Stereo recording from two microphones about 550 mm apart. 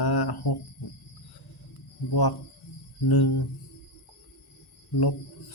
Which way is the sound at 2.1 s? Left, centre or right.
Left.